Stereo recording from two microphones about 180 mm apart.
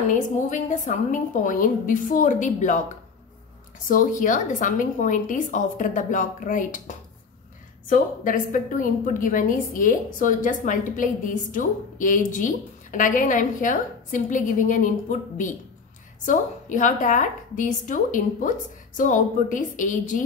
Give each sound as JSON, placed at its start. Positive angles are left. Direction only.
{"t": 0.1, "sound": "a woman's voice", "side_deg": 45}
{"t": 3.9, "sound": "a woman's voice", "side_deg": 50}